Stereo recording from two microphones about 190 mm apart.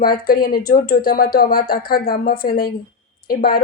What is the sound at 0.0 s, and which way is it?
Speech, 50° left (ahead or behind).